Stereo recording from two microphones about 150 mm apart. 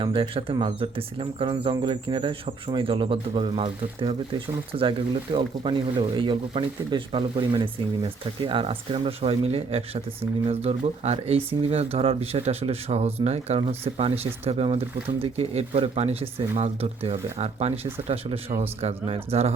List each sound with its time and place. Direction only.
0.0 s speech: 35° right (ahead or behind)